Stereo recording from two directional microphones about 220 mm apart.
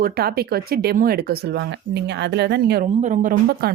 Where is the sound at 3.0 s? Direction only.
35° right (ahead or behind).